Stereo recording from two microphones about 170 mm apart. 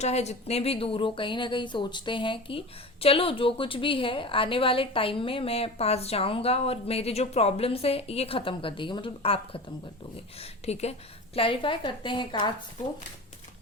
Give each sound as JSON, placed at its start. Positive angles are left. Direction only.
{"t": 0.0, "sound": "a woman's voice", "side_deg": 40}